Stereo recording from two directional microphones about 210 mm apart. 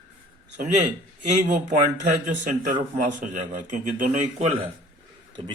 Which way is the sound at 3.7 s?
40° right (ahead or behind).